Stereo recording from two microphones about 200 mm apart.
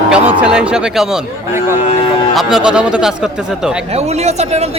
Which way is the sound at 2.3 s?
5° right (ahead or behind).